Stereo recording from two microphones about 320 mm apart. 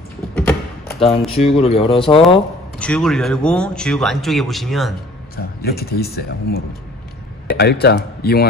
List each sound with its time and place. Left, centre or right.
0.3 s a sound: centre
0.9 s speech: centre
2.8 s speech: centre
5.3 s a man's voice: left